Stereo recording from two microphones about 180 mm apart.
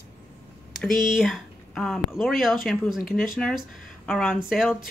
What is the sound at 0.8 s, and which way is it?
Speech, centre (ahead or behind).